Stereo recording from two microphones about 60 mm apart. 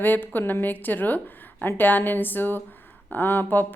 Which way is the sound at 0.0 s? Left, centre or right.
Left.